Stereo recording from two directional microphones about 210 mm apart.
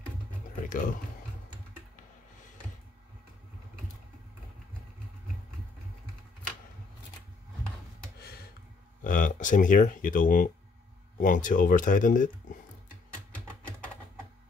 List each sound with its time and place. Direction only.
0.6 s speech: 40° left (ahead or behind)
8.2 s a sound: 45° left (ahead or behind)
9.0 s speech: 40° left (ahead or behind)